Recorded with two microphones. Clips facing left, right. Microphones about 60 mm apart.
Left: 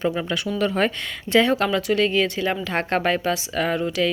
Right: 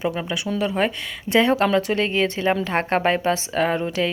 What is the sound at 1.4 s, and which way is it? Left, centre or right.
Speech, right.